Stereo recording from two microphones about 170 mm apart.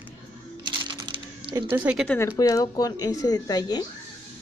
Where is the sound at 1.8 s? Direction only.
5° right (ahead or behind).